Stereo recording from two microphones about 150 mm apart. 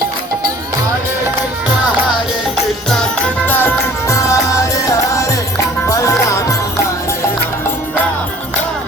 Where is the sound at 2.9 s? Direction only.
10° left (ahead or behind).